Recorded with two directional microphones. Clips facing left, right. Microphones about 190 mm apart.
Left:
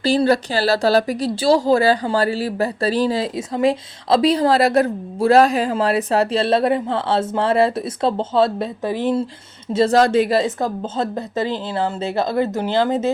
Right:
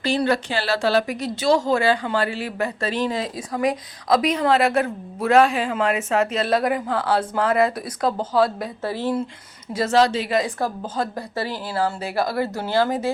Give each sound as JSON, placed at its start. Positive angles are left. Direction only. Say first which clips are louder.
{"t": 0.0, "sound": "speech", "louder": "left 5 dB", "side_deg": 35}
{"t": 9.9, "sound": "speech", "louder": "left 2 dB", "side_deg": 50}
{"t": 10.3, "sound": "speech", "louder": "left 3 dB", "side_deg": 25}